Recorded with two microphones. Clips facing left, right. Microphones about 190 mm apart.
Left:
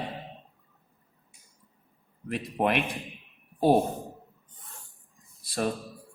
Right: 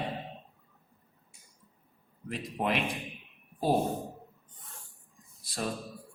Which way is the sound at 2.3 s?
60° left (ahead or behind).